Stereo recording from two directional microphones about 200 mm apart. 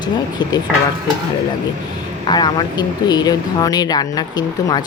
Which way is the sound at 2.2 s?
20° left (ahead or behind).